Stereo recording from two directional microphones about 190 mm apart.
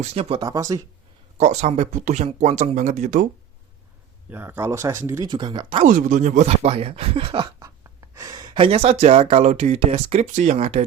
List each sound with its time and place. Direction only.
0.0 s speech: 30° right (ahead or behind)
0.4 s speech: 20° right (ahead or behind)
1.4 s speech: 35° right (ahead or behind)
4.3 s speech: 10° right (ahead or behind)
5.8 s speech: 40° right (ahead or behind)
7.6 s speech: 15° right (ahead or behind); by 10.8 s 35° right (ahead or behind)